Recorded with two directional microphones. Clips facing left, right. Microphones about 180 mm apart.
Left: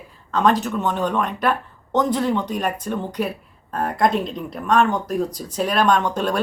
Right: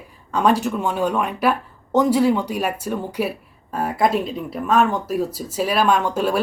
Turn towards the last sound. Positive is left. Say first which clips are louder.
# right 1 dB
turn(degrees=-5)  # may be behind; listen again after turning